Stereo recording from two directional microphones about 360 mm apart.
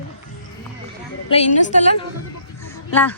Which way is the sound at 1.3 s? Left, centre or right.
Centre.